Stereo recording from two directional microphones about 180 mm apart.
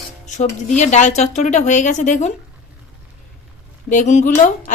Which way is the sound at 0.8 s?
40° left (ahead or behind).